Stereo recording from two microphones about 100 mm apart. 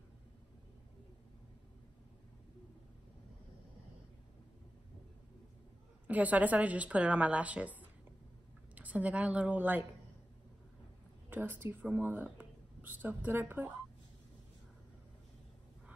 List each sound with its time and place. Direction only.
6.0 s a woman's voice: 15° right (ahead or behind)
8.7 s a woman's voice: 15° right (ahead or behind)
11.2 s speech: 20° right (ahead or behind)